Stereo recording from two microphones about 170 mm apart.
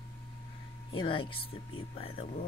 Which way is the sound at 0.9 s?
30° left (ahead or behind).